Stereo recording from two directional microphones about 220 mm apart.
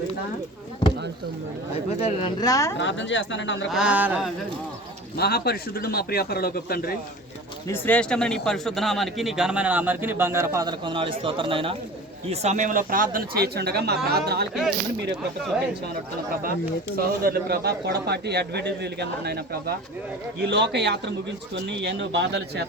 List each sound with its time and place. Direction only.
2.0 s speech: 25° left (ahead or behind)
2.7 s speech: 55° left (ahead or behind)
3.7 s speech: 5° right (ahead or behind)
5.1 s a man's voice: 45° left (ahead or behind)
7.7 s a man's voice: 5° left (ahead or behind); by 14.4 s 45° right (ahead or behind)
16.9 s a man's voice: 45° right (ahead or behind)